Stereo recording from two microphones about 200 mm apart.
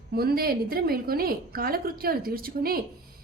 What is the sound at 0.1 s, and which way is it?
Speech, 50° right (ahead or behind).